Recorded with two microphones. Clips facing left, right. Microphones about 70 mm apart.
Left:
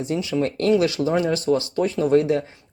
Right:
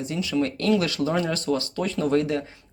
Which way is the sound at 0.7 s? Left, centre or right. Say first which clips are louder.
Left 5 dB; left.